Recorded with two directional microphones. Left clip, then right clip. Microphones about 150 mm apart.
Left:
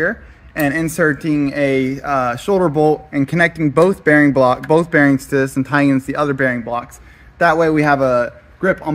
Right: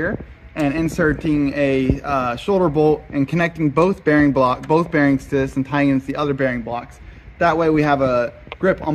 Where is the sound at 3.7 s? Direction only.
65° left (ahead or behind).